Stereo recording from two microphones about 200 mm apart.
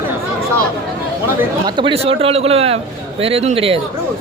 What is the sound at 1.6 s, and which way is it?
A man's voice, 25° right (ahead or behind).